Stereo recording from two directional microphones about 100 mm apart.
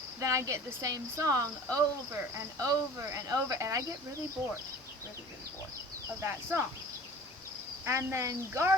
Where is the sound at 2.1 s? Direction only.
25° right (ahead or behind).